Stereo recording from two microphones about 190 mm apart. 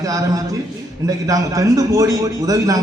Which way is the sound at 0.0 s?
20° right (ahead or behind).